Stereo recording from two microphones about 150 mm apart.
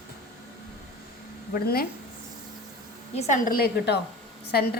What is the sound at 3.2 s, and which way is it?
Speech, 55° left (ahead or behind).